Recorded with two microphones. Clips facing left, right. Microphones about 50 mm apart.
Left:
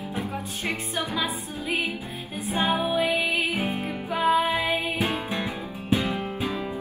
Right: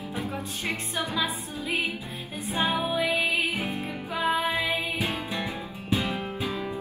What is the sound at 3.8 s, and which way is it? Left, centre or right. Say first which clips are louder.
Music: left 3 dB; left.